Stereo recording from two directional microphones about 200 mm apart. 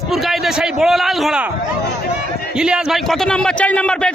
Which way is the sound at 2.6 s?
5° right (ahead or behind).